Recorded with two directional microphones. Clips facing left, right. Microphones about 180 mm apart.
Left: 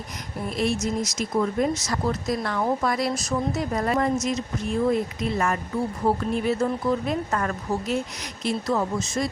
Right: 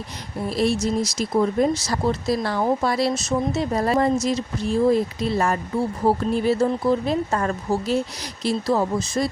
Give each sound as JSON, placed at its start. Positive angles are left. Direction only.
{"t": 0.4, "sound": "speech", "side_deg": -35}